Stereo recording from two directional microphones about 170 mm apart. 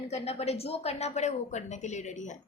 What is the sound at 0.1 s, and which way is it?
A woman's voice, 40° left (ahead or behind).